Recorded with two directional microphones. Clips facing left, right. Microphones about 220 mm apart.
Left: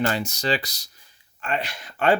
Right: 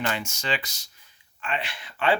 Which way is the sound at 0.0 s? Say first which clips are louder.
Left 5 dB; 40° left (ahead or behind).